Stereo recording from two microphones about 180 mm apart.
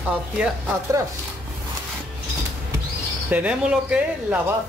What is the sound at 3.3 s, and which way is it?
Speech, 5° right (ahead or behind).